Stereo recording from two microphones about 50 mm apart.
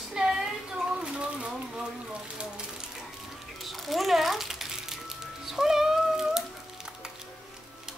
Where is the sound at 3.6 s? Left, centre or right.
Centre.